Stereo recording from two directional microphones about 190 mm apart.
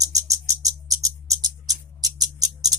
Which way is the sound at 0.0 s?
15° right (ahead or behind).